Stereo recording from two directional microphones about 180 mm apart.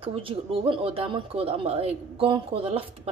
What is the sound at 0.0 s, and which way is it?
Speech, 30° right (ahead or behind).